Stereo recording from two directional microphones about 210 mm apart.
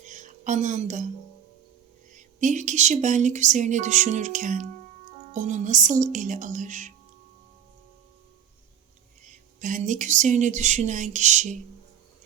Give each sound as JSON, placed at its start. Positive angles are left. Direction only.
{"t": 0.0, "sound": "a sound", "side_deg": -35}
{"t": 2.1, "sound": "speech", "side_deg": -35}
{"t": 9.6, "sound": "speech", "side_deg": -40}